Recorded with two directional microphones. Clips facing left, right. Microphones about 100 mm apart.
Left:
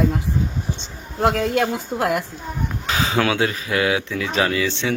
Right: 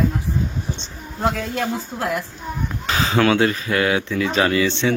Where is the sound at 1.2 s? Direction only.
70° left (ahead or behind).